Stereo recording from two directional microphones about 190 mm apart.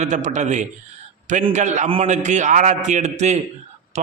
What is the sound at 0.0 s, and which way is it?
A man's voice, 40° right (ahead or behind).